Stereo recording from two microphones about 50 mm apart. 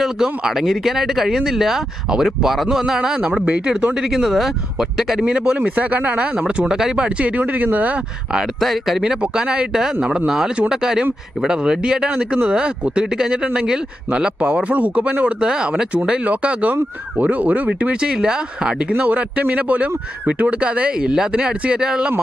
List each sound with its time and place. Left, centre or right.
0.0 s speech: centre
5.5 s speech: right
8.6 s speech: centre; by 15.4 s right
15.4 s speech: centre
18.0 s speech: centre